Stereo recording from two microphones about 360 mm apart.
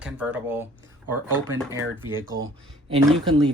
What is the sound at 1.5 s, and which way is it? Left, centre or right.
Speech, centre.